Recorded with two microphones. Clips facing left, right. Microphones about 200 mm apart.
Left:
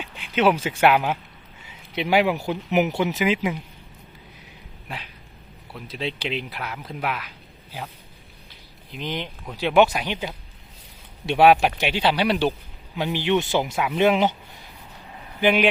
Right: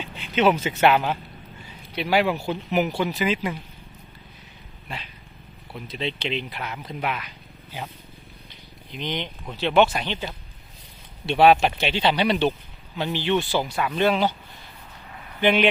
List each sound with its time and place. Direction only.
0.0 s speech: 10° left (ahead or behind)
5.7 s speech: 5° left (ahead or behind)
8.9 s speech: 5° left (ahead or behind)
15.4 s speech: 5° left (ahead or behind)